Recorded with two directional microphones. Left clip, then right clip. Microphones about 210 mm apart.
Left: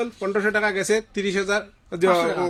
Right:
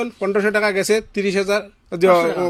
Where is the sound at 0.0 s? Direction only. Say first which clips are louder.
Right 4 dB; 35° right (ahead or behind).